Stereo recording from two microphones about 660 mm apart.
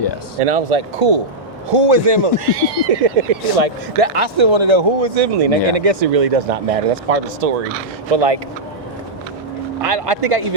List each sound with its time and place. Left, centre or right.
0.4 s speech: right
9.8 s speech: right